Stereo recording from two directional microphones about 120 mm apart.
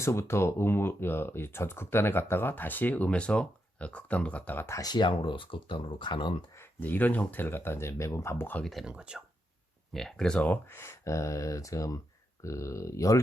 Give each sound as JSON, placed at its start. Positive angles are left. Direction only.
{"t": 0.0, "sound": "speech", "side_deg": 25}
{"t": 6.6, "sound": "speech", "side_deg": 15}
{"t": 8.6, "sound": "speech", "side_deg": 0}
{"t": 9.9, "sound": "speech", "side_deg": 5}